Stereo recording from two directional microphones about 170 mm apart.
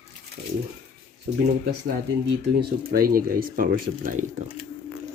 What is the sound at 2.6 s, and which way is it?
Speech, 60° right (ahead or behind).